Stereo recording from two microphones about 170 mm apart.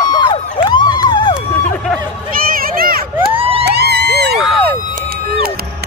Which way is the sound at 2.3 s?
60° right (ahead or behind).